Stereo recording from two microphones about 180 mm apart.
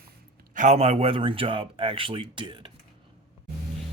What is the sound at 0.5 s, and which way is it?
Speech, 40° right (ahead or behind).